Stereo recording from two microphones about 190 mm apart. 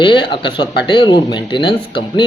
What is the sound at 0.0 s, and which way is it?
Speech, 25° left (ahead or behind).